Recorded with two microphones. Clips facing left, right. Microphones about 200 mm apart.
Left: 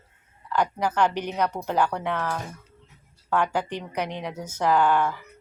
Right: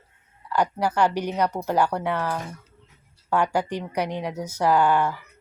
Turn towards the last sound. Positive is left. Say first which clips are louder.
# right 1 dB
turn(degrees=-10)  # may be behind; listen again after turning